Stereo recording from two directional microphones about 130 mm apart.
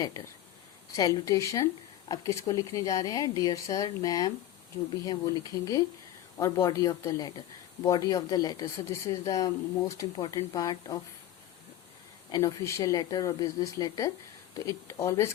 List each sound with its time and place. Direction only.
0.9 s speech: 25° left (ahead or behind)
10.0 s speech: 40° left (ahead or behind)
10.3 s speech: 25° left (ahead or behind)
12.3 s speech: 25° left (ahead or behind)